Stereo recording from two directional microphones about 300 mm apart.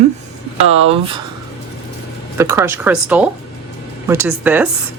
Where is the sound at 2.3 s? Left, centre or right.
Centre.